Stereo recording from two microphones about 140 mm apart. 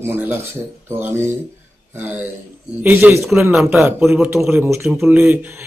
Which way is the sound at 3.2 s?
Centre (ahead or behind).